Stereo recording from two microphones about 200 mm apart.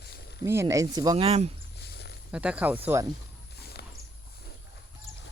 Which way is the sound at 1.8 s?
55° left (ahead or behind).